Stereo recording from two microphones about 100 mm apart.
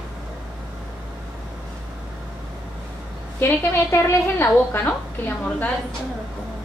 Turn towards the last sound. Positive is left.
turn(degrees=20)  # may be behind; listen again after turning